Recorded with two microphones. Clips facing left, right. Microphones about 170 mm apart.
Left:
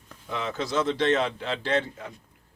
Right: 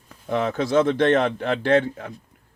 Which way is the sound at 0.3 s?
55° right (ahead or behind).